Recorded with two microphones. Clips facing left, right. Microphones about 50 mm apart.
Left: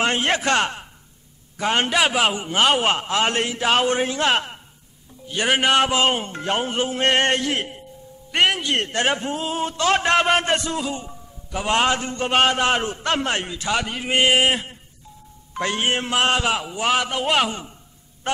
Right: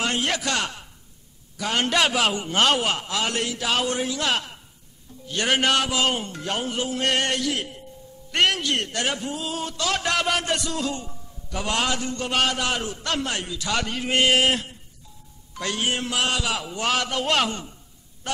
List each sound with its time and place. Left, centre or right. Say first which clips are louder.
0.0 s a man's voice: left 4 dB; left
1.9 s a man's voice: right 1 dB; centre
2.8 s a man's voice: left 5 dB; left
5.2 s a man's voice: left 2 dB; centre; by 7.8 s left
8.3 s a man's voice: left 2 dB; centre
8.7 s a man's voice: left 5 dB; left
10.8 s a man's voice: left 1 dB; centre
13.7 s a man's voice: left 2 dB; centre
15.5 s a man's voice: left 4 dB; left
16.6 s a man's voice: left 3 dB; centre
18.3 s honk: left 5 dB; left